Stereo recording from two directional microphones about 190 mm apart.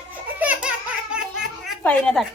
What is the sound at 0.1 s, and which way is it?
Baby laughter, 10° right (ahead or behind).